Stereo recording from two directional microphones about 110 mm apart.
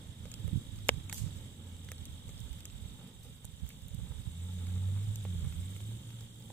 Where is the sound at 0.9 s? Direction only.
20° left (ahead or behind).